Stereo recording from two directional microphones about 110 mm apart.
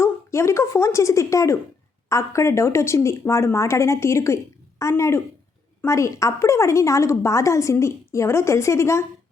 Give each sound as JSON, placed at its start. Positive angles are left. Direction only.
{"t": 0.0, "sound": "a woman's voice", "side_deg": 25}